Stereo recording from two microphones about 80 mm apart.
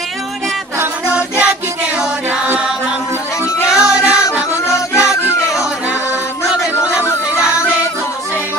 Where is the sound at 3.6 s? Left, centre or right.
Centre.